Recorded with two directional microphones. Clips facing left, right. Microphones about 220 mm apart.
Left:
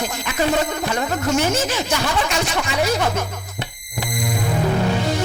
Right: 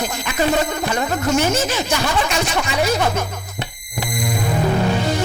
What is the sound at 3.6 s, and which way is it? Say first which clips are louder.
Music: right 1 dB; 10° right (ahead or behind).